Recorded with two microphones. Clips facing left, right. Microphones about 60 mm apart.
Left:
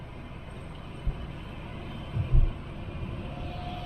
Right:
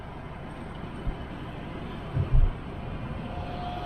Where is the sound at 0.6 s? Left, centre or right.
Right.